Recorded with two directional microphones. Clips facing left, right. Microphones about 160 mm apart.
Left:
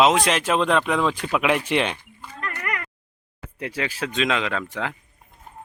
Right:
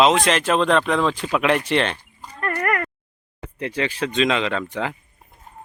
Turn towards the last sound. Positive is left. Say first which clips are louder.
# right 3 dB
turn(degrees=0)  # may be behind; listen again after turning